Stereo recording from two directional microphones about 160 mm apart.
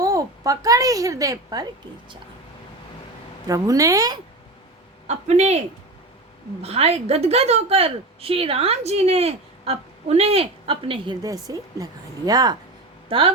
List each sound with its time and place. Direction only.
0.0 s a woman's voice: 20° right (ahead or behind)
3.4 s speech: 20° right (ahead or behind)
5.0 s a woman's voice: 45° right (ahead or behind); by 12.5 s 25° right (ahead or behind)
13.1 s a woman's voice: 35° right (ahead or behind)